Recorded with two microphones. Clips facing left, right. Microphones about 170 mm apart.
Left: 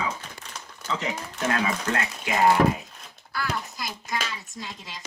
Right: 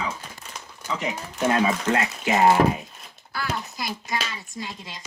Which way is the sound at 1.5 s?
25° right (ahead or behind).